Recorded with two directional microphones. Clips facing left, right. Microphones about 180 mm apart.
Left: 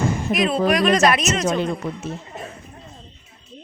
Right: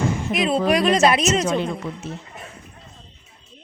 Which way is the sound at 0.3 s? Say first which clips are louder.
Even; 30° right (ahead or behind).